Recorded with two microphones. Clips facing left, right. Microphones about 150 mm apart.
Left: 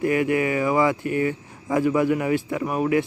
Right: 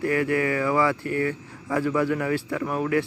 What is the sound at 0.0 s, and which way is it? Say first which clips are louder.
Speech: left 2 dB; 20° left (ahead or behind).